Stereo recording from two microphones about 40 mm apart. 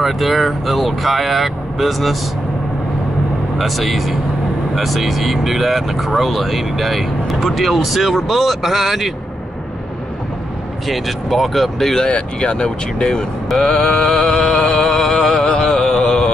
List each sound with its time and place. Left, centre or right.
0.0 s speech: centre
3.5 s speech: centre
10.9 s speech: centre
12.1 s speech: left
13.5 s vehicle: centre
14.2 s mantra: centre
15.6 s music: centre
16.0 s music: centre